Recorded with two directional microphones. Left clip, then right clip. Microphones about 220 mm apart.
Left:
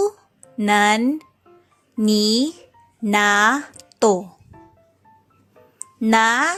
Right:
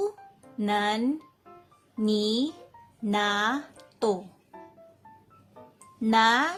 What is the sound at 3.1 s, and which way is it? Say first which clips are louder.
Speech: left 10 dB; 25° left (ahead or behind).